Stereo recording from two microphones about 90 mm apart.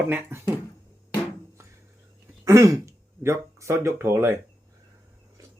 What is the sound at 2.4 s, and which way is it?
Speech, 35° right (ahead or behind).